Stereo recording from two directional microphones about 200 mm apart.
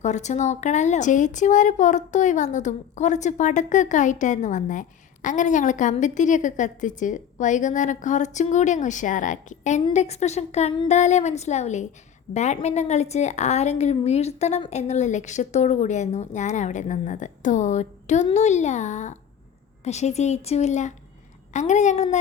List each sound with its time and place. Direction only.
0.0 s a woman's voice: 35° left (ahead or behind)